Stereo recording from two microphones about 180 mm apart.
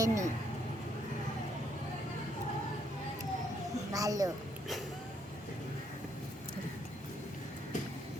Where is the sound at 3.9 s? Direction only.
20° right (ahead or behind).